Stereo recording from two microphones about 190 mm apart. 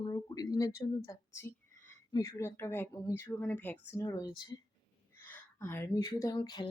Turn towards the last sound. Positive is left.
turn(degrees=25)  # may be behind; listen again after turning